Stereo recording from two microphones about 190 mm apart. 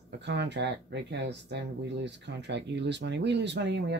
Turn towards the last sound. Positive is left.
turn(degrees=-65)  # may be behind; listen again after turning